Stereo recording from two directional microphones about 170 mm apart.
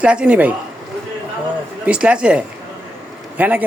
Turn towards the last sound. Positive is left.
turn(degrees=-10)  # may be behind; listen again after turning